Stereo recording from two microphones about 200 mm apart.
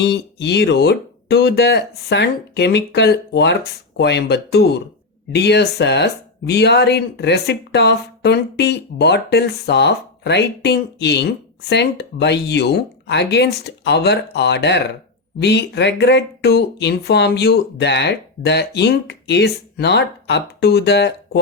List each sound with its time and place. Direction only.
0.0 s speech: 55° left (ahead or behind)